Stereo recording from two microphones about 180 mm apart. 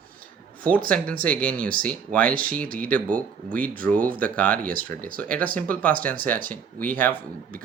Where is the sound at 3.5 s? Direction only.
50° right (ahead or behind).